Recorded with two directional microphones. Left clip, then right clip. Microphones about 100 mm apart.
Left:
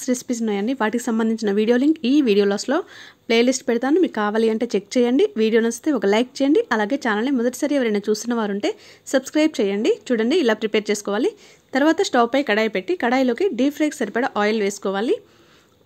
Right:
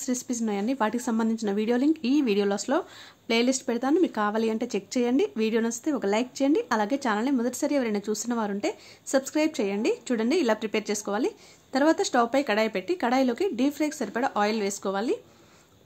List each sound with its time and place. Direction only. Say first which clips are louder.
0.0 s speech: left 7 dB; 35° left (ahead or behind)